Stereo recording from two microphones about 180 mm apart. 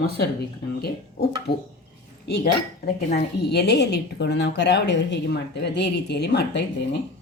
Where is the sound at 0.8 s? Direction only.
60° left (ahead or behind).